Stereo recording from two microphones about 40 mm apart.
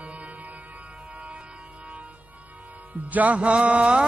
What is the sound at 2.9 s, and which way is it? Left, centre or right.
Music, right.